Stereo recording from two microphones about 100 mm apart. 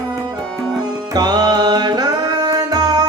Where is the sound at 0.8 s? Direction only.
40° right (ahead or behind).